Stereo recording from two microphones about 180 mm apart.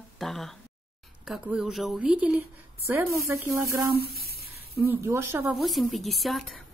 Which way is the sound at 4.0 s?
60° right (ahead or behind).